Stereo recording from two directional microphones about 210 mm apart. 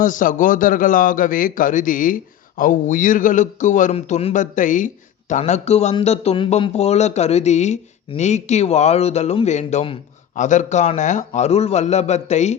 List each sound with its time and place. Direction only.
0.0 s a man's voice: 40° left (ahead or behind)